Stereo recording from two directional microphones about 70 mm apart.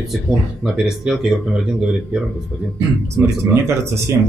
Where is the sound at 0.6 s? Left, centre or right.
Centre.